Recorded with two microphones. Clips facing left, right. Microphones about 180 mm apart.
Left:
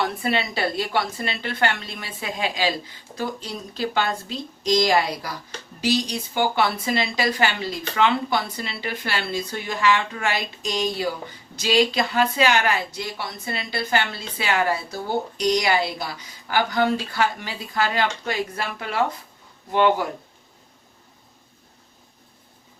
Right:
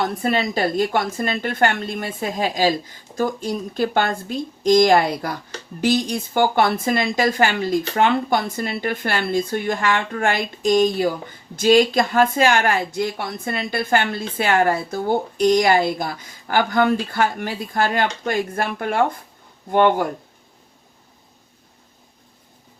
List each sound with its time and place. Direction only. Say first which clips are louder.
0.0 s speech: right 3 dB; 45° right (ahead or behind)